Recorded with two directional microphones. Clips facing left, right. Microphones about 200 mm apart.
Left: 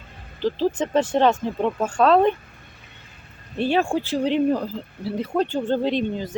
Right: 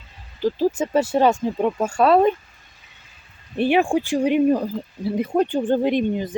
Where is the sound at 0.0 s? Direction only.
55° left (ahead or behind).